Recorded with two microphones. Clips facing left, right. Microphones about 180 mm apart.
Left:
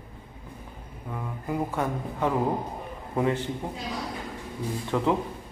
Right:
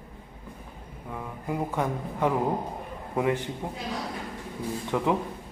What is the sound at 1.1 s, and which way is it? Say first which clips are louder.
Speech: left 1 dB; 15° right (ahead or behind).